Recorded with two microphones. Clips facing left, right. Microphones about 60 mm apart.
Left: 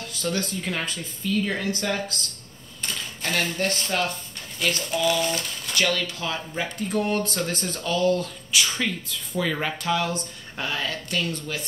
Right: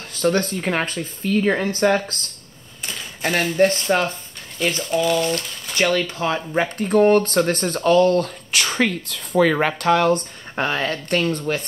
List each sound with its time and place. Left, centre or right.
0.1 s speech: right
2.8 s typewriter: centre
3.6 s speech: right
5.2 s speech: centre
5.8 s speech: right